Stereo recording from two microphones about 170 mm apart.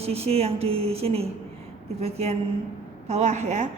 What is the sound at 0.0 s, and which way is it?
A woman's voice, 35° right (ahead or behind).